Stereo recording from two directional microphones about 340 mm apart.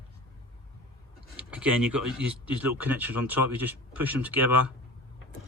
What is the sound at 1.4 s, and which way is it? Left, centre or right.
Speech, centre.